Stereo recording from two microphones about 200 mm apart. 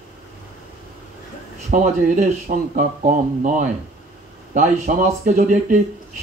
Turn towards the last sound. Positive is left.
turn(degrees=-35)  # may be behind; listen again after turning